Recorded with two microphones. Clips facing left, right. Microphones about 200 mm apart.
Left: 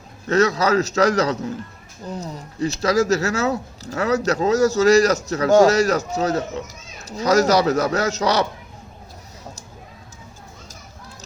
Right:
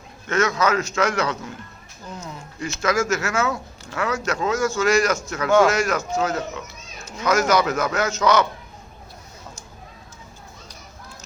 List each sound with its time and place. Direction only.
0.3 s speech: 35° left (ahead or behind)